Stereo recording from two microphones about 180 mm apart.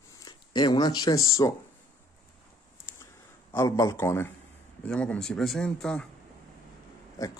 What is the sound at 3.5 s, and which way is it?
A man's voice, 20° left (ahead or behind).